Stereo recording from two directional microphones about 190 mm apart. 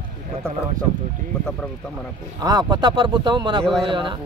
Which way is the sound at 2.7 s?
25° right (ahead or behind).